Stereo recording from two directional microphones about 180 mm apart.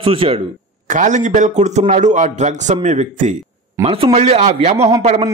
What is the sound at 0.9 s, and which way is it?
A man's voice, 40° right (ahead or behind).